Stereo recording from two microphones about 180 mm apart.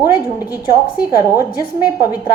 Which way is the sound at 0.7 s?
15° right (ahead or behind).